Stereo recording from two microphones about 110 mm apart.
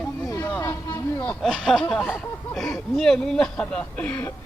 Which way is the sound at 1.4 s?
Centre (ahead or behind).